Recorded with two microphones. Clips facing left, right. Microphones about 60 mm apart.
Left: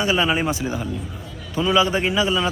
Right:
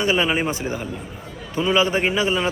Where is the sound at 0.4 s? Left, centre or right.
Right.